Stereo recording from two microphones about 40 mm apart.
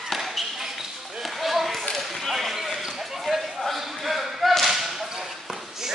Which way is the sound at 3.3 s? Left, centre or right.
Centre.